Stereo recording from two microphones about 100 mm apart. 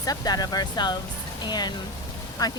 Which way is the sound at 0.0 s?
40° left (ahead or behind).